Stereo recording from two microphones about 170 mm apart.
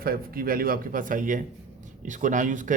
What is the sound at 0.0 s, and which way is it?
A man's voice, 60° right (ahead or behind).